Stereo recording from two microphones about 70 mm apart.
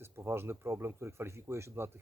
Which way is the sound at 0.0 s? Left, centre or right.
Right.